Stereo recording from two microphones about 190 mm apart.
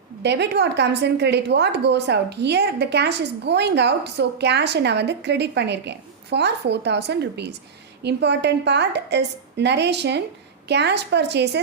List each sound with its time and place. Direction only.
0.2 s a woman's voice: 65° right (ahead or behind)